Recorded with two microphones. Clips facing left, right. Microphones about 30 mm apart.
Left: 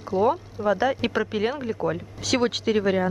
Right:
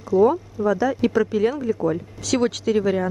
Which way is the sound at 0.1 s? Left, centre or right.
Left.